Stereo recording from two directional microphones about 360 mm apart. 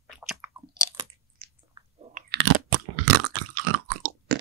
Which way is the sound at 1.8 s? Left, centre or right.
Centre.